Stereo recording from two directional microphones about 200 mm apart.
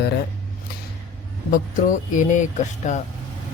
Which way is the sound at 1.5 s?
40° left (ahead or behind).